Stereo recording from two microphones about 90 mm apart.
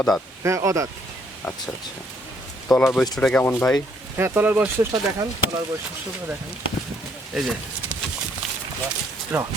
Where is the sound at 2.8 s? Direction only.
5° left (ahead or behind).